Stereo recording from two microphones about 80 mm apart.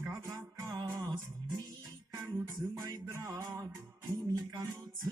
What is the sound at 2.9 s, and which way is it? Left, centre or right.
Music, right.